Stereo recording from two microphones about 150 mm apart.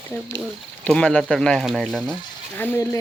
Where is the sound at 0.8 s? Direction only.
5° left (ahead or behind).